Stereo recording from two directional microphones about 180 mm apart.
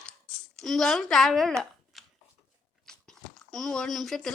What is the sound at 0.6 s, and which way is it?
Speech, centre (ahead or behind).